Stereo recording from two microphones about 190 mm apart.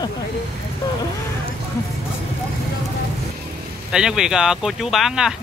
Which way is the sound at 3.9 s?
5° right (ahead or behind).